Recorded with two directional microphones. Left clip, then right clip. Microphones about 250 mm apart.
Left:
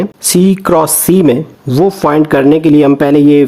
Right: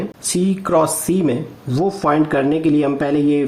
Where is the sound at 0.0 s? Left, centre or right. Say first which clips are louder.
Left 10 dB; left.